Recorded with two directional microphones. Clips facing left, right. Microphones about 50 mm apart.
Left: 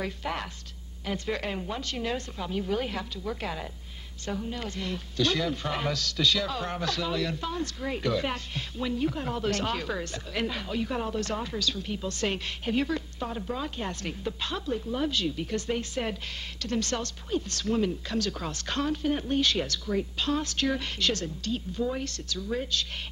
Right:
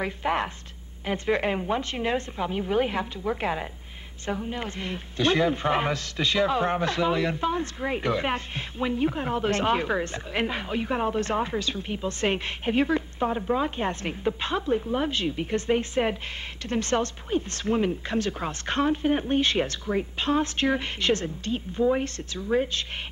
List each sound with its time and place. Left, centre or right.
0.0 s a man's voice: right